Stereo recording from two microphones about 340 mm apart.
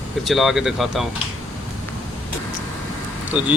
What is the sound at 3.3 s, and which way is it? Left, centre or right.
Speech, centre.